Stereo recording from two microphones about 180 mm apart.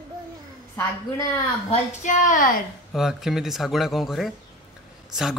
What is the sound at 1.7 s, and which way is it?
Speech, 45° left (ahead or behind).